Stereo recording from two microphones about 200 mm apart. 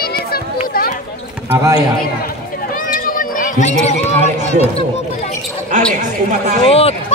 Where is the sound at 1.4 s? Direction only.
15° right (ahead or behind).